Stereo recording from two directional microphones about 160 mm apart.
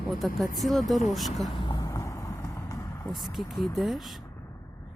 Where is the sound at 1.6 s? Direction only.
30° left (ahead or behind).